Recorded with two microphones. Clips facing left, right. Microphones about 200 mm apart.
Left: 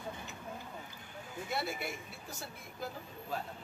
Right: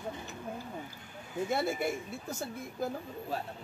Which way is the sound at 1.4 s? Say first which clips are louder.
Right 6 dB; 50° right (ahead or behind).